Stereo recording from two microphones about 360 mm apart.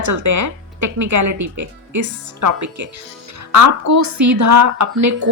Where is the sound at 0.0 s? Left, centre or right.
Right.